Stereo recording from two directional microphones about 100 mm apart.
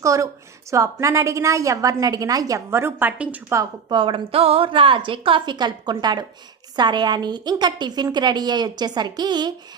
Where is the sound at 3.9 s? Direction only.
60° right (ahead or behind).